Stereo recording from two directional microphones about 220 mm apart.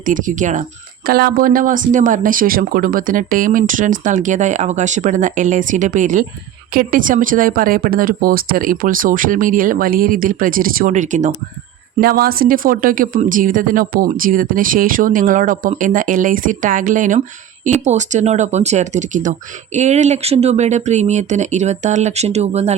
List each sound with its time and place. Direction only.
0.0 s speech: 35° right (ahead or behind)